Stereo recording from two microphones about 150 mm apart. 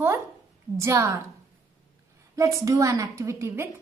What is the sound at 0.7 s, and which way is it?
Speech, 20° right (ahead or behind).